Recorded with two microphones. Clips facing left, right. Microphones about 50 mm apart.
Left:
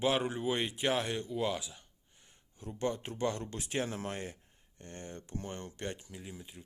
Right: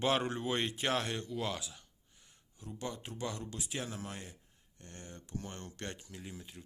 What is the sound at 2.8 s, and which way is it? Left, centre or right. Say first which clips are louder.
Speech: left 7 dB; left.